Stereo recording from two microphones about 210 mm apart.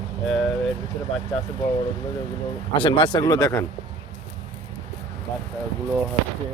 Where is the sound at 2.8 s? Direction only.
25° left (ahead or behind).